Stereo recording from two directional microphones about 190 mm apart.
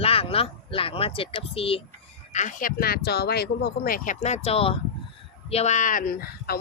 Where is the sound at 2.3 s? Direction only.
40° left (ahead or behind).